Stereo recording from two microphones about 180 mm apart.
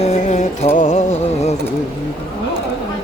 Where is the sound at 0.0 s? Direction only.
40° left (ahead or behind).